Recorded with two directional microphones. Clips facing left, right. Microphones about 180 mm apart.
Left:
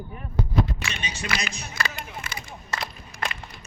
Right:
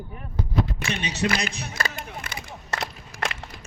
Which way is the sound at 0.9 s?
65° right (ahead or behind).